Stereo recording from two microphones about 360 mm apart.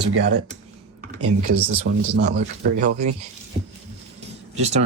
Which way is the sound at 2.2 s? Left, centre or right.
Right.